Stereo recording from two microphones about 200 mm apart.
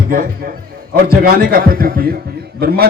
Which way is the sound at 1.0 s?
50° right (ahead or behind).